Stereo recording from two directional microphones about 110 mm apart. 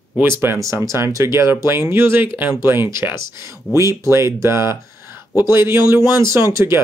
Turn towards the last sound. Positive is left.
turn(degrees=-25)  # may be behind; listen again after turning